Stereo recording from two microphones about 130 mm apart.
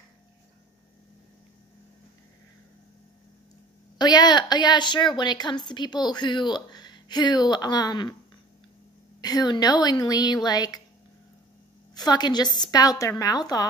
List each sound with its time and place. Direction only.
4.0 s a woman's voice: 35° left (ahead or behind)
9.2 s a woman's voice: 30° left (ahead or behind)
11.9 s a woman's voice: 30° left (ahead or behind)